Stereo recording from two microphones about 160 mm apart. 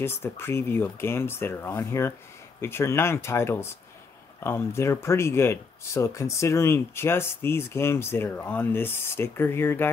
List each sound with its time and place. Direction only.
0.0 s speech: 15° left (ahead or behind)